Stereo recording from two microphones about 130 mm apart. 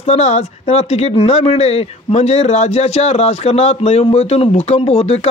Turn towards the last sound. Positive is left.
turn(degrees=50)  # may be behind; listen again after turning